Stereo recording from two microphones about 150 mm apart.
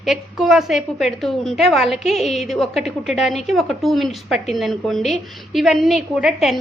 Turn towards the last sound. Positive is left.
turn(degrees=0)  # may be behind; listen again after turning